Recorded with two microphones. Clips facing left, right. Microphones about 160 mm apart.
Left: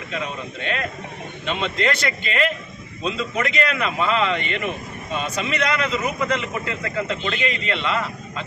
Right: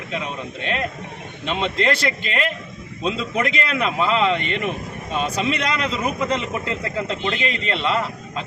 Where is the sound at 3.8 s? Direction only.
35° right (ahead or behind).